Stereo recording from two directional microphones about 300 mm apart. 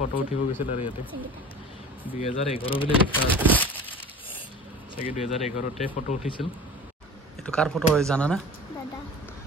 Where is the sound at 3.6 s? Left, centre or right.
Centre.